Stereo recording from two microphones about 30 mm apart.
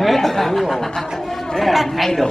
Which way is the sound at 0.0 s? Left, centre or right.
Centre.